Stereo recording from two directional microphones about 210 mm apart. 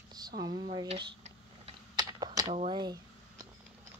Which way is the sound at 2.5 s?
25° right (ahead or behind).